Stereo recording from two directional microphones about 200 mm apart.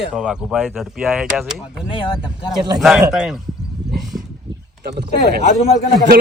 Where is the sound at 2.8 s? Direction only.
5° right (ahead or behind).